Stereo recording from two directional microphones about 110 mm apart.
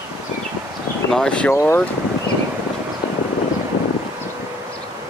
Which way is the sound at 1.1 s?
10° left (ahead or behind).